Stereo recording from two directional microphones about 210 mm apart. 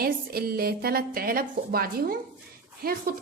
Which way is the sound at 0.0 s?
45° right (ahead or behind).